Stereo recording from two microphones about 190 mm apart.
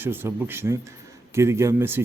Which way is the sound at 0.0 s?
10° right (ahead or behind).